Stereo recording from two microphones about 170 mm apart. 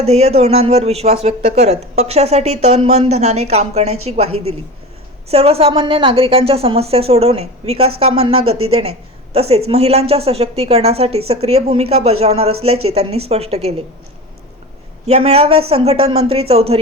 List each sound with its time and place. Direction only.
0.0 s a woman's voice: 40° right (ahead or behind)
15.0 s a woman's voice: 35° right (ahead or behind)